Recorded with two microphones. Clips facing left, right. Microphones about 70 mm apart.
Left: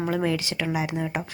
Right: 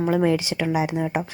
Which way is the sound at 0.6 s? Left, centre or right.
Centre.